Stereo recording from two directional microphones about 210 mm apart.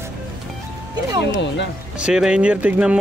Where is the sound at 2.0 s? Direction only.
5° right (ahead or behind).